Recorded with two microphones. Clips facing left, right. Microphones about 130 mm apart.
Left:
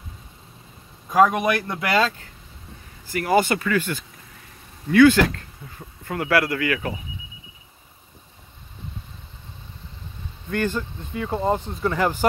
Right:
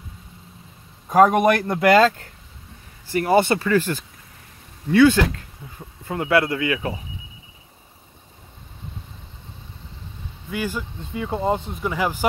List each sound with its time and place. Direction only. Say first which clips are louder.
1.1 s speech: right 3 dB; 45° right (ahead or behind)
3.1 s speech: right 2 dB; 30° right (ahead or behind)
4.9 s speech: left 1 dB; 20° right (ahead or behind)
10.5 s speech: left 3 dB; 10° right (ahead or behind)